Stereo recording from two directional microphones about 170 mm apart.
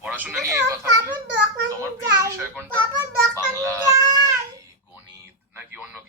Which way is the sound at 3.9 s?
20° right (ahead or behind).